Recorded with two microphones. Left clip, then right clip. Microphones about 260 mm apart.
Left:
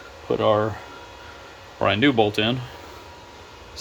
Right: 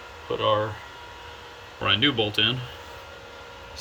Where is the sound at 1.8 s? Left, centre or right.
Centre.